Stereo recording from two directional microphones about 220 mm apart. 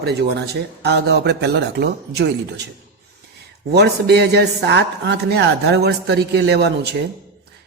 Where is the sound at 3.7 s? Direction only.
50° right (ahead or behind).